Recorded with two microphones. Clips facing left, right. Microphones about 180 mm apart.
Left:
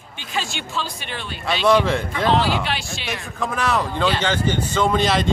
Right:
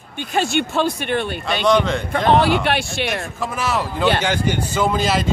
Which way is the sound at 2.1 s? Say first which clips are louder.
Right 8 dB; 55° right (ahead or behind).